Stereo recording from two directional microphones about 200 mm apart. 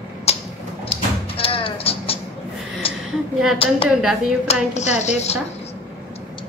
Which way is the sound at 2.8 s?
30° left (ahead or behind).